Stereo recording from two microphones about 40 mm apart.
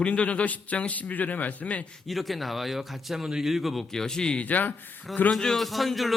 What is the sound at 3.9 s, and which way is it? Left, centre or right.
Speech, centre.